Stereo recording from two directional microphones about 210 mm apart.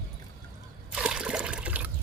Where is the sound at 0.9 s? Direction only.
5° right (ahead or behind).